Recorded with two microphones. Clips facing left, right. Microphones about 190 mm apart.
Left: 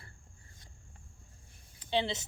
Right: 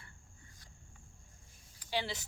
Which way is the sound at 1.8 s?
25° left (ahead or behind).